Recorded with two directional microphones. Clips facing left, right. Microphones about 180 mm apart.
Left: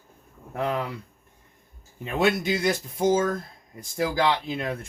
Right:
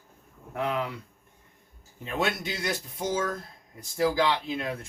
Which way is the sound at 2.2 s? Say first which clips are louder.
Left 8 dB; 50° left (ahead or behind).